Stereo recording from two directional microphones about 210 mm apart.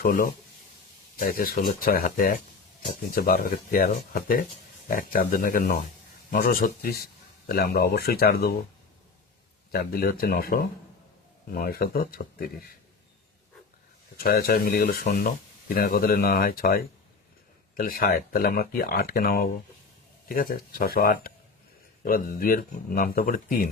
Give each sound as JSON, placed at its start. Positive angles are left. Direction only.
{"t": 0.0, "sound": "speech", "side_deg": 40}
{"t": 9.7, "sound": "speech", "side_deg": 45}
{"t": 14.2, "sound": "speech", "side_deg": 45}